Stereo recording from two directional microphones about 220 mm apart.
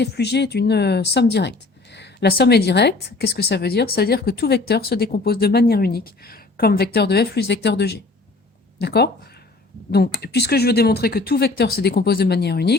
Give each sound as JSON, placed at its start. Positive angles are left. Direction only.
{"t": 0.0, "sound": "speech", "side_deg": 50}